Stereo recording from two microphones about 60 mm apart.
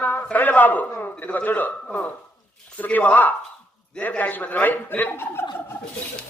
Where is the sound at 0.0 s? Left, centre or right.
Left.